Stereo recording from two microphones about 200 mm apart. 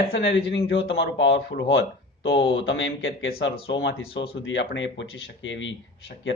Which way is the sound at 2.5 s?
75° left (ahead or behind).